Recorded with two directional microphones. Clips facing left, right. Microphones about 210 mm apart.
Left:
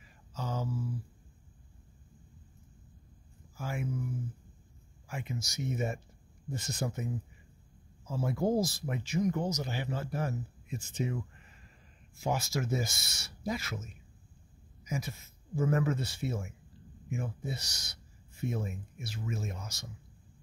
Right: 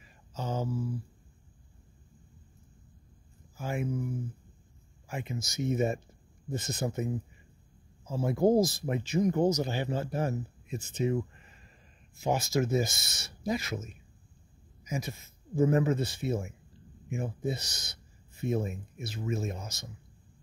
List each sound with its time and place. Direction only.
0.3 s mantra: 20° right (ahead or behind)
3.6 s speech: 20° right (ahead or behind)
5.0 s speech: 20° right (ahead or behind)
8.2 s speech: 20° right (ahead or behind)
12.2 s speech: 20° right (ahead or behind)